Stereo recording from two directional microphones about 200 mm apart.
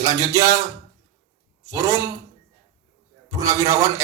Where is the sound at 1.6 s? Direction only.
15° right (ahead or behind).